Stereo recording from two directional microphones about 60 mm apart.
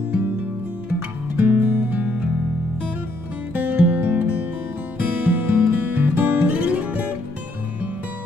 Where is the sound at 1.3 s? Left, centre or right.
Right.